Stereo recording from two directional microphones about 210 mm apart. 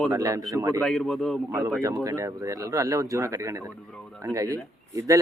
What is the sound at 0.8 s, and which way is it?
Speech, centre (ahead or behind).